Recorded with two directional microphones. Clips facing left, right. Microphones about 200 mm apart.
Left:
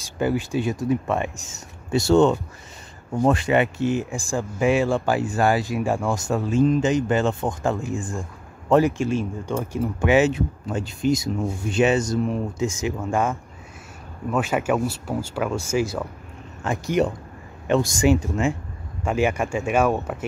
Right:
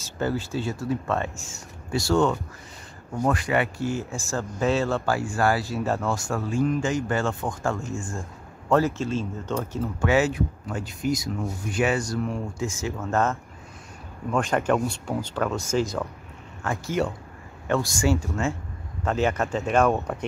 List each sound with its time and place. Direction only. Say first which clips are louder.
0.0 s speech: left 4 dB; 15° left (ahead or behind)